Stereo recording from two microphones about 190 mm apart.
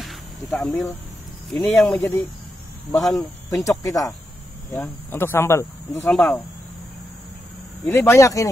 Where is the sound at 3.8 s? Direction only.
20° left (ahead or behind).